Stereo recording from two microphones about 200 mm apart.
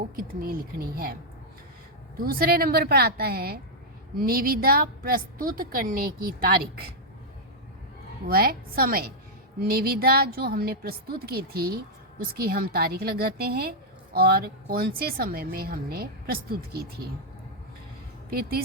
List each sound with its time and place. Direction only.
0.2 s a woman's voice: 45° right (ahead or behind)
2.1 s a woman's voice: 45° right (ahead or behind)
8.3 s a woman's voice: 50° right (ahead or behind)
18.3 s a woman's voice: 50° right (ahead or behind)